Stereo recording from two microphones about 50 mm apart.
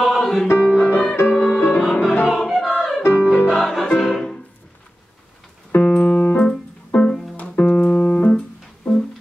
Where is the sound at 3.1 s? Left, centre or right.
Left.